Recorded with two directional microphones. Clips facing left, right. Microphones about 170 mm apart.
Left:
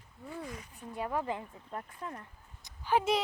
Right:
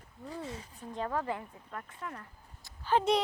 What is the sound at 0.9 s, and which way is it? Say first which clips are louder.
Speech: even; 15° left (ahead or behind).